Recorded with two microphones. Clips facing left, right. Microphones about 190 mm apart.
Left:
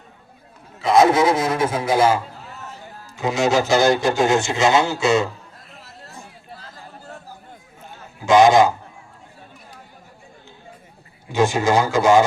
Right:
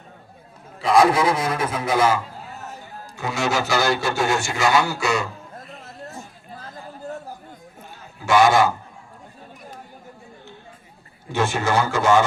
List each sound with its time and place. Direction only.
0.9 s a man's voice: 25° left (ahead or behind)
3.2 s a man's voice: 20° left (ahead or behind)
5.8 s chatter: 45° right (ahead or behind)
8.2 s a man's voice: 20° left (ahead or behind)
11.3 s a man's voice: 15° left (ahead or behind)